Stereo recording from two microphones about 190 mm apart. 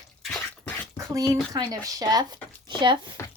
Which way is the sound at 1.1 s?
20° right (ahead or behind).